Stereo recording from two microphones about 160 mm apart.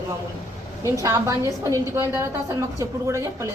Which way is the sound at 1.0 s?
20° right (ahead or behind).